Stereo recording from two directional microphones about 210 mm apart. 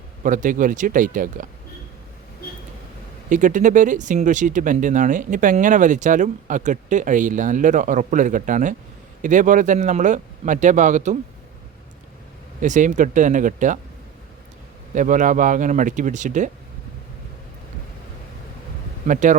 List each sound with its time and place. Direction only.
0.2 s speech: 40° right (ahead or behind)
3.2 s speech: 35° right (ahead or behind)
12.6 s speech: 35° right (ahead or behind)
14.9 s speech: 35° right (ahead or behind)
19.0 s speech: 40° right (ahead or behind)